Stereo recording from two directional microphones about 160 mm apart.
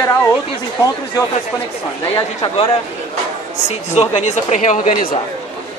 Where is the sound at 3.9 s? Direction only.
45° left (ahead or behind).